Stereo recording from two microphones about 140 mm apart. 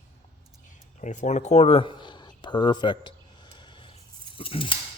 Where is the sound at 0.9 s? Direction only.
60° left (ahead or behind); by 3.1 s 35° left (ahead or behind).